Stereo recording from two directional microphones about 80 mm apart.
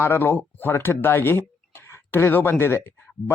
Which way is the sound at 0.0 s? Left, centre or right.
Left.